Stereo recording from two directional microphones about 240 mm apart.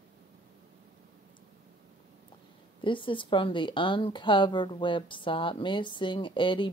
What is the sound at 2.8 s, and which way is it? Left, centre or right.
A woman's voice, left.